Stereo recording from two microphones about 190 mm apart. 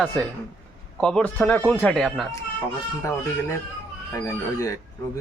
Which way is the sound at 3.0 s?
15° left (ahead or behind).